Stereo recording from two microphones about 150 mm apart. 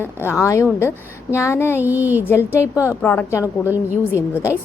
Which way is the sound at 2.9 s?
15° left (ahead or behind).